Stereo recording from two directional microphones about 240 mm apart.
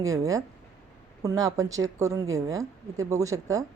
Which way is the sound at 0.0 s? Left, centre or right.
Centre.